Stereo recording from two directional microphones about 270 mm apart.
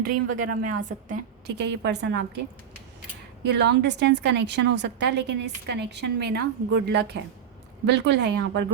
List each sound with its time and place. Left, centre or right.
0.4 s a woman's voice: right
3.4 s a woman's voice: right